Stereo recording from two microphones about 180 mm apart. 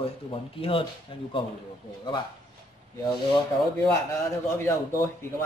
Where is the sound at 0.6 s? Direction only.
30° left (ahead or behind).